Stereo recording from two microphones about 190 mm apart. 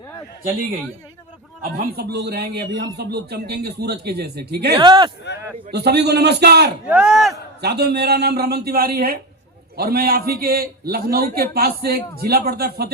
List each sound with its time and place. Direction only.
1.7 s a man's voice: 55° right (ahead or behind)
4.8 s speech: 25° right (ahead or behind)
5.7 s a man's voice: 60° right (ahead or behind)
6.8 s speech: 5° right (ahead or behind)
7.6 s a man's voice: 60° right (ahead or behind)